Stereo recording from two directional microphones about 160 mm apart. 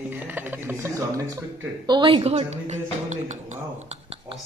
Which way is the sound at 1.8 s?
30° right (ahead or behind).